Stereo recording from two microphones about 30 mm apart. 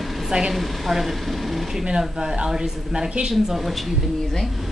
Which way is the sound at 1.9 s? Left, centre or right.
Right.